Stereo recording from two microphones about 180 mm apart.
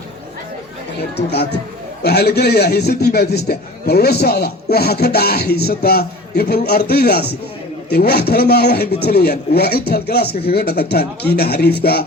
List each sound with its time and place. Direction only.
1.1 s a man's voice: 65° left (ahead or behind)